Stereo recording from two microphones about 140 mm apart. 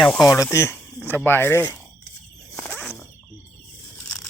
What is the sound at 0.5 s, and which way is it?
Speech, 20° left (ahead or behind).